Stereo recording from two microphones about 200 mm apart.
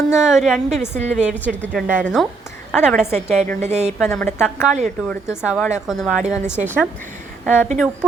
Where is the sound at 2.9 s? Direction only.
35° right (ahead or behind).